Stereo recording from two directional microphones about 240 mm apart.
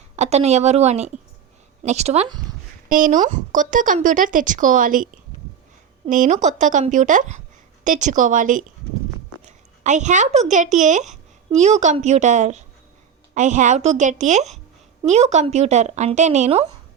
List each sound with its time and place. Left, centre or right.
0.2 s speech: right
2.9 s a woman's voice: right